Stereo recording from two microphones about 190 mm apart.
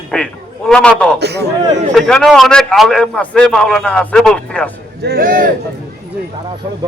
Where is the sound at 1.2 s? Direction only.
60° right (ahead or behind).